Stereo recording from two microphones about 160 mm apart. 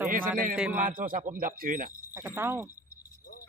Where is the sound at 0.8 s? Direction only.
55° right (ahead or behind).